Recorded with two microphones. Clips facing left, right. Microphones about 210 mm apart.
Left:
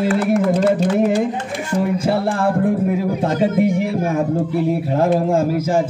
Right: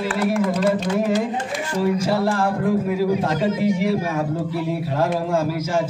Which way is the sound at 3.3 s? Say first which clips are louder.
Left 4 dB; 55° left (ahead or behind).